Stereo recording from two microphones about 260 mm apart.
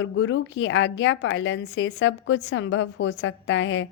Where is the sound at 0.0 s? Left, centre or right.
Left.